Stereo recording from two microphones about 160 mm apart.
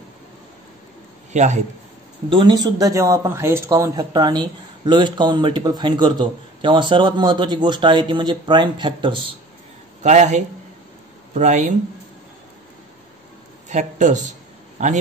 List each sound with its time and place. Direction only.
1.3 s a man's voice: 45° right (ahead or behind)
2.2 s speech: 30° right (ahead or behind)
10.0 s a man's voice: 45° right (ahead or behind)
13.7 s speech: 50° right (ahead or behind)